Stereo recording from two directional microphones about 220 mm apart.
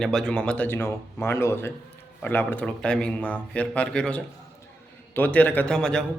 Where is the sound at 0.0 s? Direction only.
Centre (ahead or behind).